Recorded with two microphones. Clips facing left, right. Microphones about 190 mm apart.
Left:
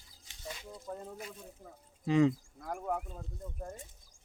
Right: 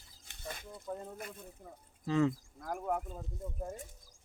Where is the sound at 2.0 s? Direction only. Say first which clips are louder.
Left 3 dB; 15° left (ahead or behind).